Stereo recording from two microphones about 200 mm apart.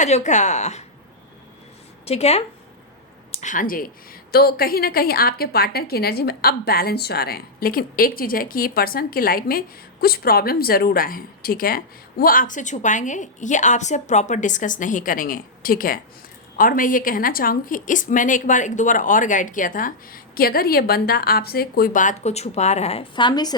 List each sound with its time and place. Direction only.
0.0 s a woman's voice: 35° left (ahead or behind)
2.0 s a woman's voice: 30° left (ahead or behind)